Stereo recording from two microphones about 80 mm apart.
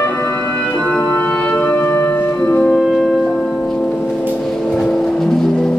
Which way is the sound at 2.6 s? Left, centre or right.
Centre.